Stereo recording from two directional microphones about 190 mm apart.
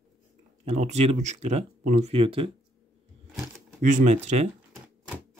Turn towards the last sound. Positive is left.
turn(degrees=-35)  # may be behind; listen again after turning